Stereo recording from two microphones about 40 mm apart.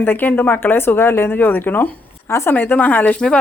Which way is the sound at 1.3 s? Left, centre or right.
Left.